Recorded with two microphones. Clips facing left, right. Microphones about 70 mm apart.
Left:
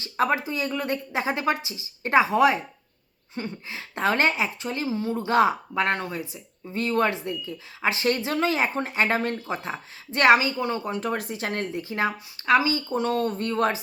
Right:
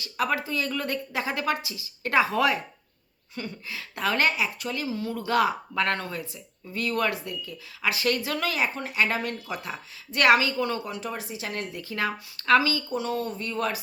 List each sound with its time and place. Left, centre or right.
0.0 s a woman's voice: left
10.9 s speech: left
11.7 s a woman's voice: left
12.9 s speech: left